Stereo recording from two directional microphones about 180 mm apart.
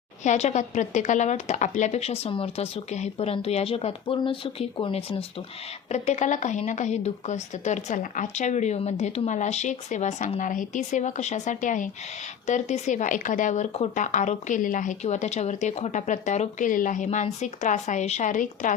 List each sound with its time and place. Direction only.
0.2 s a woman's voice: 40° left (ahead or behind)